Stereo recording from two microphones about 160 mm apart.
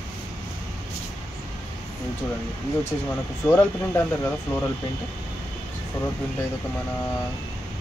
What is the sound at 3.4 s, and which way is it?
Speech, 15° left (ahead or behind).